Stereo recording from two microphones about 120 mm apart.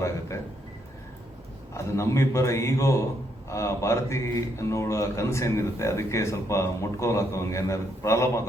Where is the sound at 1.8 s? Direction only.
25° left (ahead or behind).